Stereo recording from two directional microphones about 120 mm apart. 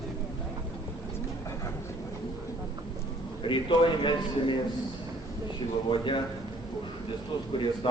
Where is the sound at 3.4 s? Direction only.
40° left (ahead or behind).